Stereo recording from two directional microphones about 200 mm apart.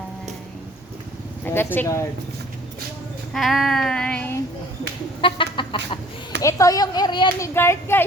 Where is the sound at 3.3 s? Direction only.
Centre (ahead or behind).